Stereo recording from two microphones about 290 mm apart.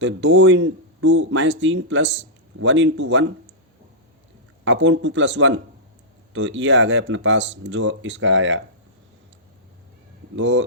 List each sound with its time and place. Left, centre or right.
0.0 s speech: right
4.6 s speech: right
10.3 s speech: right